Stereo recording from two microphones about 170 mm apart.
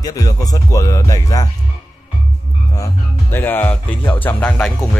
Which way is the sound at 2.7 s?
15° left (ahead or behind).